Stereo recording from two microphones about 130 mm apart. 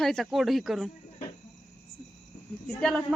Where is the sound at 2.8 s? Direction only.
5° left (ahead or behind).